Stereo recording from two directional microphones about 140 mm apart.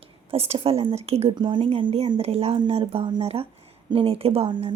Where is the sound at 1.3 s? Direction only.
35° right (ahead or behind).